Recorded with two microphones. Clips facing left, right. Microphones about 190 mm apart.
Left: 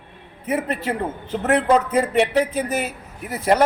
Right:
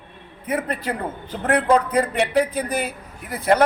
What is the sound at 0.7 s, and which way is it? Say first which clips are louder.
Speech: left 2 dB; 25° left (ahead or behind).